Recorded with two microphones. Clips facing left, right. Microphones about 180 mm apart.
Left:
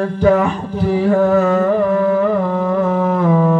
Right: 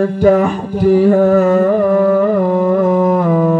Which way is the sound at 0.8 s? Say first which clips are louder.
Right 5 dB; 45° right (ahead or behind).